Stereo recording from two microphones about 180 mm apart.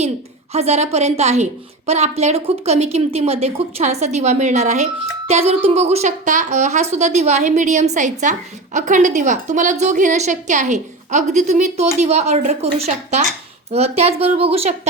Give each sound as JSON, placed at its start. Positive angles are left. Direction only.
{"t": 0.5, "sound": "speech", "side_deg": -35}